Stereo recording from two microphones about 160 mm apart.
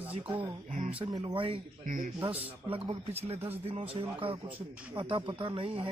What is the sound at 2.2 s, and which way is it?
Speech, 35° right (ahead or behind).